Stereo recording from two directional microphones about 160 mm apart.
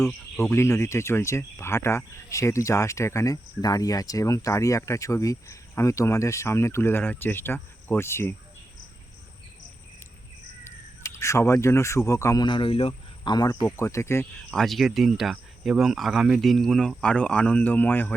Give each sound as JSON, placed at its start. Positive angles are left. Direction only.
{"t": 0.5, "sound": "speech", "side_deg": 15}
{"t": 11.1, "sound": "speech", "side_deg": 15}
{"t": 14.5, "sound": "speech", "side_deg": 0}